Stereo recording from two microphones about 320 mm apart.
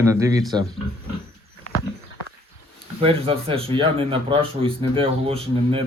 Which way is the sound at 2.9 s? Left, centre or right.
Centre.